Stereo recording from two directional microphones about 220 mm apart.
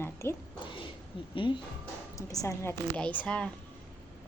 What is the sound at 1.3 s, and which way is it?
A woman's voice, 20° left (ahead or behind).